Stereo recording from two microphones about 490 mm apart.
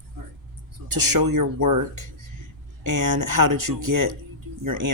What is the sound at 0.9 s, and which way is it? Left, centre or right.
Speech, right.